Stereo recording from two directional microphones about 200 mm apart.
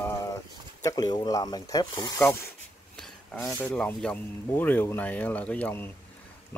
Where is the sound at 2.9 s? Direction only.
5° left (ahead or behind).